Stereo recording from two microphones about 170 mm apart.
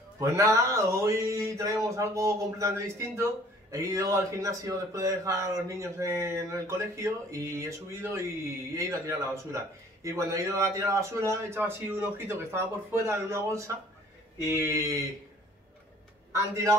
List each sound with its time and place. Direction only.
0.2 s a man's voice: 20° right (ahead or behind)